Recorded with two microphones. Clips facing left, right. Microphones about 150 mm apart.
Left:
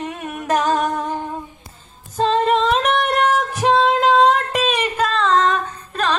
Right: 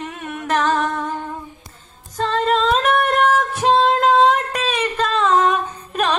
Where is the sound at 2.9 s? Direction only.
Centre (ahead or behind).